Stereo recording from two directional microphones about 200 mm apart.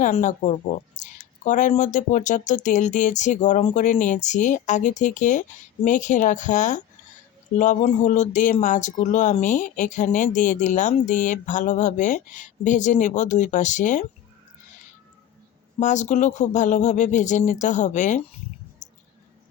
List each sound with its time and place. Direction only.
0.0 s speech: 40° left (ahead or behind)
15.8 s speech: 35° left (ahead or behind)